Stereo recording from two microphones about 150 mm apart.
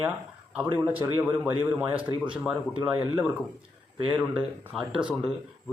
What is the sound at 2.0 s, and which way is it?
Speech, 35° right (ahead or behind).